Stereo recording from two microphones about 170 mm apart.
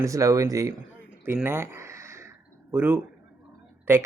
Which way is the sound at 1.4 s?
15° right (ahead or behind).